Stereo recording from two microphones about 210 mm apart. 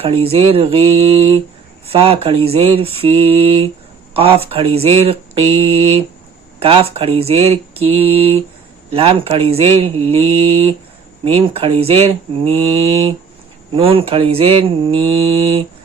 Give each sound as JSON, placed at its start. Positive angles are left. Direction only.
{"t": 0.0, "sound": "speech", "side_deg": -25}